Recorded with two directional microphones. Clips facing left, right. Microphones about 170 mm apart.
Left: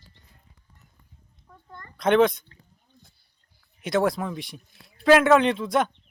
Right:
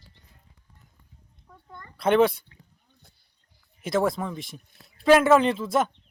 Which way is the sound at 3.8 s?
Centre (ahead or behind).